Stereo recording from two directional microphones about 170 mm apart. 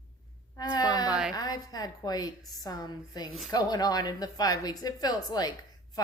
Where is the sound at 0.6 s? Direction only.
25° left (ahead or behind).